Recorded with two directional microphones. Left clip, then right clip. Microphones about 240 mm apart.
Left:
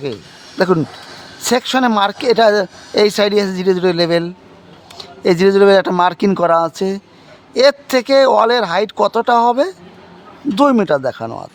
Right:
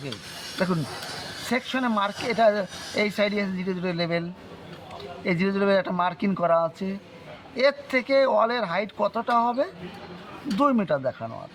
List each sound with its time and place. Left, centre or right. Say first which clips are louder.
1.5 s speech: left 13 dB; left